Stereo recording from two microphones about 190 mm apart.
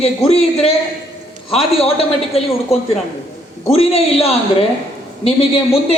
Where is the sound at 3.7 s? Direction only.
30° left (ahead or behind).